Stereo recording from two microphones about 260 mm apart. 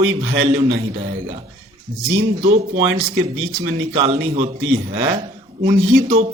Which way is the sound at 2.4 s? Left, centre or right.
Right.